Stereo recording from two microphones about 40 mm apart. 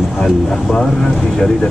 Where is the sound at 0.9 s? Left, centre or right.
Centre.